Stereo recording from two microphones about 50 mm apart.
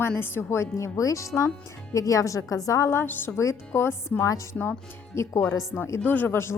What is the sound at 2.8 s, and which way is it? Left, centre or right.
Speech, left.